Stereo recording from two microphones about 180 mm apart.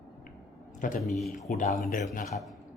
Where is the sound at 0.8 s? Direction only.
45° left (ahead or behind).